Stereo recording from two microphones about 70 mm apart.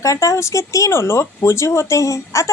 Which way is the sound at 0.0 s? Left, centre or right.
Left.